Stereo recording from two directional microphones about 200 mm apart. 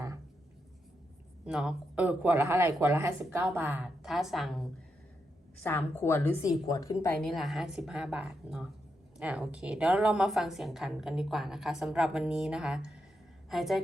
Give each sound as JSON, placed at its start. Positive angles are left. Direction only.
{"t": 1.5, "sound": "a woman's voice", "side_deg": -5}
{"t": 5.6, "sound": "a woman's voice", "side_deg": 10}
{"t": 7.0, "sound": "a woman's voice", "side_deg": 5}